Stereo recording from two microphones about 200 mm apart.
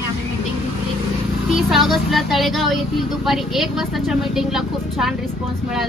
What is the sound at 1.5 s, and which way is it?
Speech, centre (ahead or behind).